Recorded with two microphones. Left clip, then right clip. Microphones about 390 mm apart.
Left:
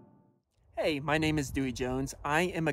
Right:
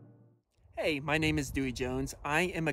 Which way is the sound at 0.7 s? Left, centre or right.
Centre.